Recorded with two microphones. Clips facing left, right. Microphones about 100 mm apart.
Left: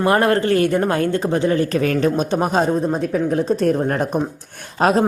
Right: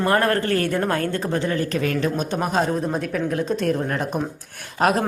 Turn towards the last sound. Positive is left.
turn(degrees=30)  # may be behind; listen again after turning